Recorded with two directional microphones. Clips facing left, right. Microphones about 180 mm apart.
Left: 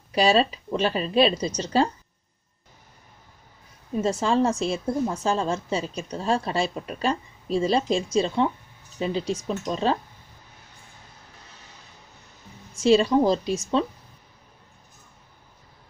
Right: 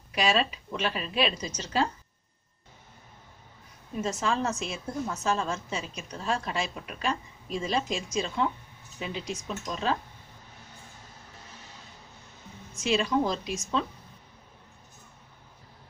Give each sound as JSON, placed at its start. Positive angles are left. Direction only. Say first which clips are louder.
{"t": 0.1, "sound": "a woman's voice", "louder": "left 6 dB", "side_deg": 30}
{"t": 4.0, "sound": "a woman's voice", "louder": "left 7 dB", "side_deg": 30}
{"t": 12.8, "sound": "a woman's voice", "louder": "left 8 dB", "side_deg": 30}